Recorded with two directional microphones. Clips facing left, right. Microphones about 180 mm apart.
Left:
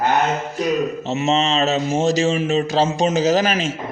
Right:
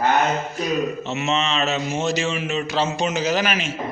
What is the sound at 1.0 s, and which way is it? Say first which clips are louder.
Speech: left 4 dB; 30° left (ahead or behind).